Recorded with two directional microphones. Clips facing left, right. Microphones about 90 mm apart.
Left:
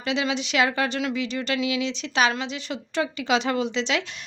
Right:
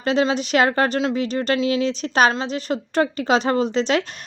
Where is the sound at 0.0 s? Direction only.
40° right (ahead or behind).